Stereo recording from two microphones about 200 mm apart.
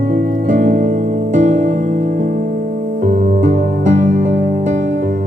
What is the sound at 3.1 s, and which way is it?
Music, 40° right (ahead or behind).